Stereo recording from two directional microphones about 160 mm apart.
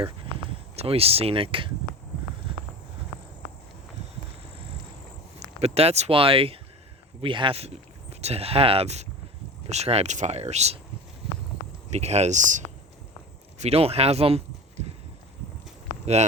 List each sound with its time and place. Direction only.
0.8 s speech: 40° right (ahead or behind)
5.4 s speech: 40° right (ahead or behind)
11.9 s speech: 45° right (ahead or behind)
13.6 s speech: 40° right (ahead or behind)